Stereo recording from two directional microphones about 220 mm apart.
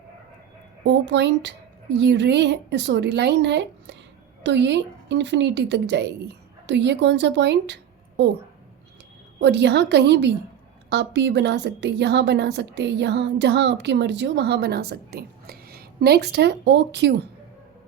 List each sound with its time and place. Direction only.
0.9 s a woman's voice: 55° right (ahead or behind)
9.4 s a woman's voice: 50° right (ahead or behind)